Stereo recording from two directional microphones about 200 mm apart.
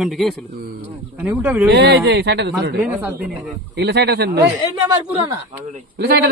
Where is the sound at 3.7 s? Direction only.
55° right (ahead or behind).